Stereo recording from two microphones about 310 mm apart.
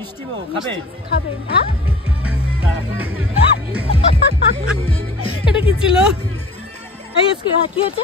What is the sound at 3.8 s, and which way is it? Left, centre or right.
Music, centre.